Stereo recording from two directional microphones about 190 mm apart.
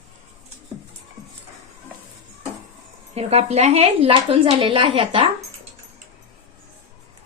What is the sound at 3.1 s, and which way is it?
A woman's voice, 35° right (ahead or behind).